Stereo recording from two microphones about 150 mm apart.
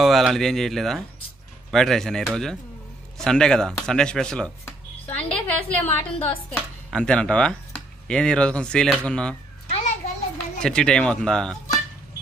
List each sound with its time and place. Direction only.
0.0 s speech: centre (ahead or behind)
10.0 s children playing: 45° left (ahead or behind)
10.6 s speech: 5° left (ahead or behind)